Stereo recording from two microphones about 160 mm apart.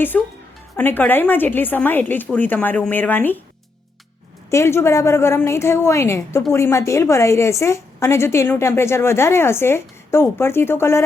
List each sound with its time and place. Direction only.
0.1 s a woman's voice: 10° left (ahead or behind)
4.5 s a woman's voice: 15° left (ahead or behind)